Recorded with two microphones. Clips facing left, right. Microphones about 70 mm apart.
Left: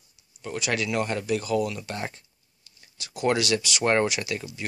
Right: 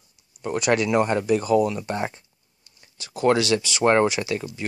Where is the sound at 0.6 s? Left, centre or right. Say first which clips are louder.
Right 7 dB; right.